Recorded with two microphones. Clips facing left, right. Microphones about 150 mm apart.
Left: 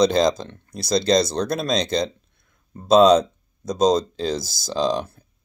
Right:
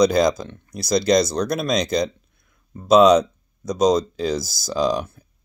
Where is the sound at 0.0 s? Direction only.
25° left (ahead or behind).